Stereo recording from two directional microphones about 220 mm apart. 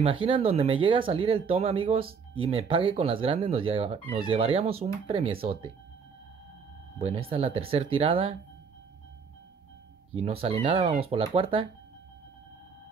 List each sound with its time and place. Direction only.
0.0 s speech: 25° right (ahead or behind)
7.0 s speech: 25° right (ahead or behind)
10.1 s speech: 25° right (ahead or behind)